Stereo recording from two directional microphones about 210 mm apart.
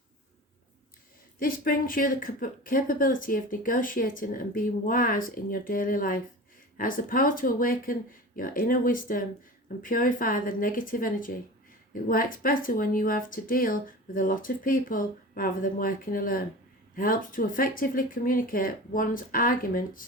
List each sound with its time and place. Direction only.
1.4 s speech: 40° left (ahead or behind)